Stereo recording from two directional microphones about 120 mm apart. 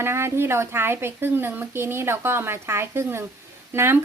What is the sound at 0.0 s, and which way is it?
A woman's voice, 20° right (ahead or behind).